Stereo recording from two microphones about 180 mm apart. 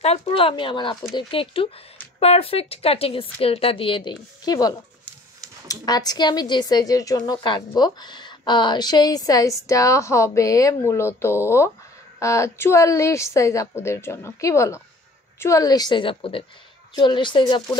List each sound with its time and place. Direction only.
0.0 s a woman's voice: 35° left (ahead or behind)